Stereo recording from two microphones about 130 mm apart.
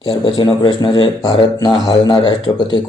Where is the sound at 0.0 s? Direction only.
30° left (ahead or behind).